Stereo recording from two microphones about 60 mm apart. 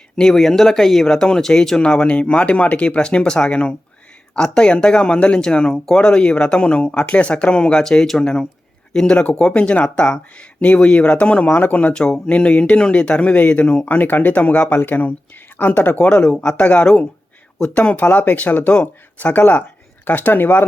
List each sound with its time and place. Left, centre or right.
0.2 s speech: centre
9.5 s speech: left
13.8 s speech: left
16.0 s speech: centre; by 20.7 s left